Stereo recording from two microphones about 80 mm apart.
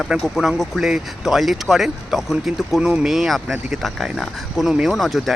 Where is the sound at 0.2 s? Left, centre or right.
Centre.